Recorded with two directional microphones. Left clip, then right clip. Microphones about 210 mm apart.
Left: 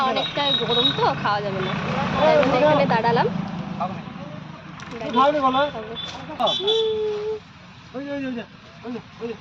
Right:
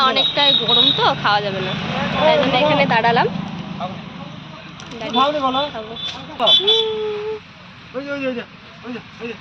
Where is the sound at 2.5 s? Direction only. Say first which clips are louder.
Right 2 dB; 5° right (ahead or behind).